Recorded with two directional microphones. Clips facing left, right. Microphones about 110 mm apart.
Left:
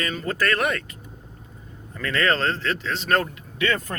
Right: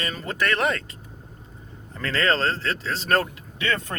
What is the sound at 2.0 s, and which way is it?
Speech, 30° right (ahead or behind).